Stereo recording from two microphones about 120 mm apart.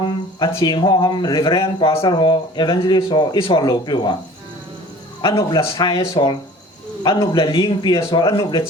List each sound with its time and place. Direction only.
0.0 s speech: 40° left (ahead or behind)
5.2 s speech: 45° left (ahead or behind)